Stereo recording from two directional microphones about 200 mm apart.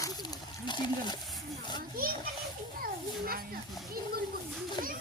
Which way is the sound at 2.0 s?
45° right (ahead or behind).